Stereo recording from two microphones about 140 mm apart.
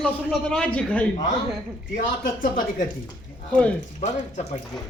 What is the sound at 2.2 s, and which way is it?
Speech, 80° left.